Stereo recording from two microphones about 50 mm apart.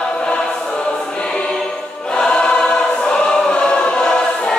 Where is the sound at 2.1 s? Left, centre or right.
Centre.